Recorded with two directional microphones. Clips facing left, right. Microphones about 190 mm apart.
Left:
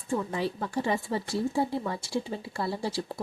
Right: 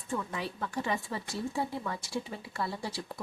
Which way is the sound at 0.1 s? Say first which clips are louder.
Left 6 dB; 30° left (ahead or behind).